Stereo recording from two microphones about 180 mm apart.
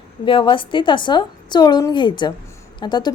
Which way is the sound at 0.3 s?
30° left (ahead or behind).